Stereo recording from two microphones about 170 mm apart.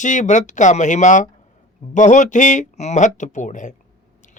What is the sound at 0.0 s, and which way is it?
Speech, 45° left (ahead or behind).